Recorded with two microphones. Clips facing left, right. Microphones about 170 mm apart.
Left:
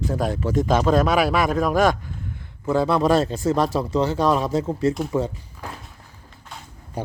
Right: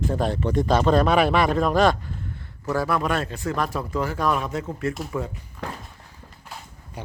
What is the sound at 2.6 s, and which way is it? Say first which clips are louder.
Speech: left 5 dB; 25° left (ahead or behind).